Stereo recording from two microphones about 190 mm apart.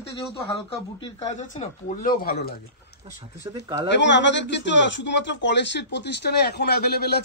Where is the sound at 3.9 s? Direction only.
70° left (ahead or behind).